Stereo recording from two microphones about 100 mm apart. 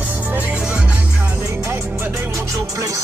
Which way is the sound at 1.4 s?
30° right (ahead or behind).